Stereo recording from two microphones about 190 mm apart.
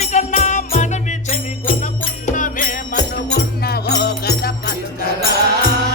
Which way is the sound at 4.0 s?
60° left (ahead or behind).